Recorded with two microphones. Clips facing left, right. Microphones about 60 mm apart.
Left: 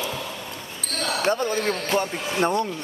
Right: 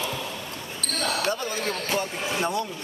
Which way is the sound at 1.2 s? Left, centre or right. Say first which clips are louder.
Left 5 dB; left.